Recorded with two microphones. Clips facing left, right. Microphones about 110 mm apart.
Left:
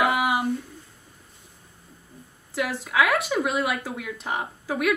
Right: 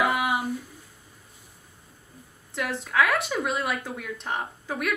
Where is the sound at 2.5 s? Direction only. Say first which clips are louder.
Left 1 dB; 5° left (ahead or behind).